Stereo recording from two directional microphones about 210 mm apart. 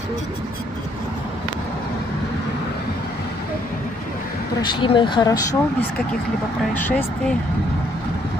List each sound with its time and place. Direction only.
4.6 s speech: 20° left (ahead or behind)